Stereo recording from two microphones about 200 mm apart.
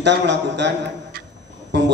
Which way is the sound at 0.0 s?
60° right (ahead or behind).